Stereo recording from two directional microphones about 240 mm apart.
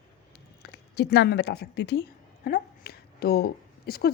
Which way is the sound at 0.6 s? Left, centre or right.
Left.